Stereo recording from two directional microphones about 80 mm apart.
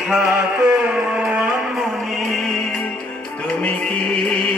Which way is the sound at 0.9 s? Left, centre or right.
Centre.